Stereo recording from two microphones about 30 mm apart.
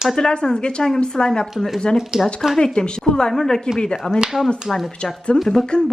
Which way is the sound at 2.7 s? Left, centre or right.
Left.